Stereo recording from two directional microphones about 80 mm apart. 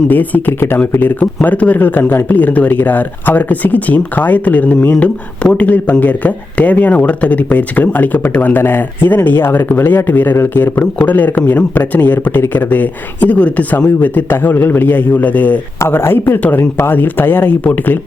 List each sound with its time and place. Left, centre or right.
0.1 s a man's voice: left
15.8 s a man's voice: left